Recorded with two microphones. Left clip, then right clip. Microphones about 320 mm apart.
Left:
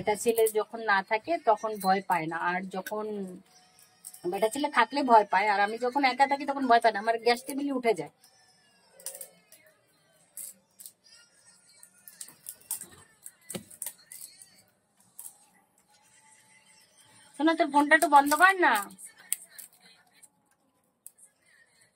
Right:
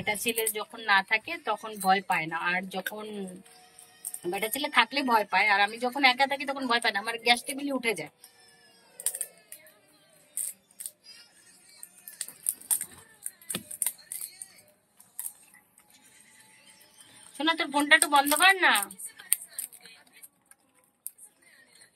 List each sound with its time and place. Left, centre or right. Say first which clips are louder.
0.0 s a woman's voice: left 4 dB; centre
4.3 s a woman's voice: left 3 dB; centre
17.4 s speech: left 3 dB; centre